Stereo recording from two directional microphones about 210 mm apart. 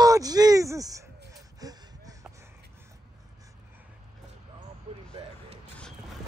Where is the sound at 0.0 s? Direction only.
15° right (ahead or behind).